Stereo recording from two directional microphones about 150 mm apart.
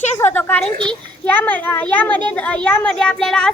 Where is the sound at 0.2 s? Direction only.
15° left (ahead or behind).